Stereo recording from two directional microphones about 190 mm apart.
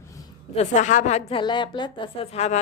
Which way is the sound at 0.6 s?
40° left (ahead or behind).